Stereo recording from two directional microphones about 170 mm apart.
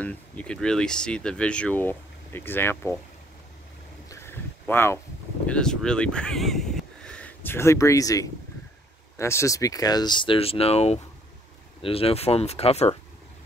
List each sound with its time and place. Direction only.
0.0 s speech: 10° left (ahead or behind)
4.1 s a sound: 15° left (ahead or behind)
5.5 s speech: 5° left (ahead or behind); by 12.9 s 35° left (ahead or behind)